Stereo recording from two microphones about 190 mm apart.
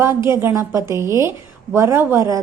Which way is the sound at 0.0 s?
15° right (ahead or behind).